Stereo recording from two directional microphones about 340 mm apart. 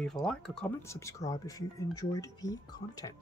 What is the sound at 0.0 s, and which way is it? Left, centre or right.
Speech, centre.